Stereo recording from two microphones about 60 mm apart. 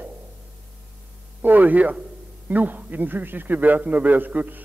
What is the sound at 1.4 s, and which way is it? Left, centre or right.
A man's voice, right.